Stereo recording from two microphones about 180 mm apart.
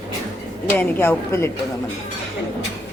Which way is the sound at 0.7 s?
10° left (ahead or behind).